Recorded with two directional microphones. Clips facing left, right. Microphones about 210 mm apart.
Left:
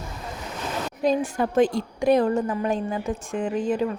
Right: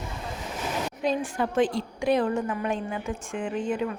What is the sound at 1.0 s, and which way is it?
A woman's voice, 40° left (ahead or behind).